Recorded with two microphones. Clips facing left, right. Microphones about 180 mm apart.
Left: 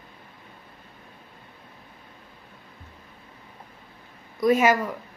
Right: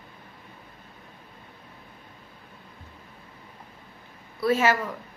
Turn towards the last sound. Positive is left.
turn(degrees=10)  # may be behind; listen again after turning